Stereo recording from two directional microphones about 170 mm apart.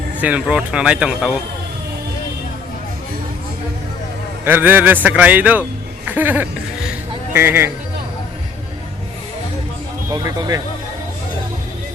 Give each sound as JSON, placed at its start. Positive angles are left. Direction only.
{"t": 0.2, "sound": "speech", "side_deg": -5}
{"t": 4.4, "sound": "a man's voice", "side_deg": -10}
{"t": 10.1, "sound": "speech", "side_deg": -25}